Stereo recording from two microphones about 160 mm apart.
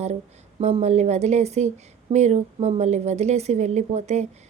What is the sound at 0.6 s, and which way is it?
Speech, 40° right (ahead or behind).